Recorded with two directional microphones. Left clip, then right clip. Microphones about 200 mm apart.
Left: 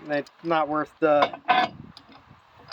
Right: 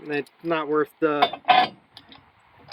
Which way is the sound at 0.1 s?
15° left (ahead or behind).